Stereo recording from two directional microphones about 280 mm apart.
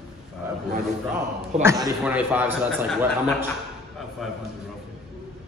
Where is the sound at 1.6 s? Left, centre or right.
Centre.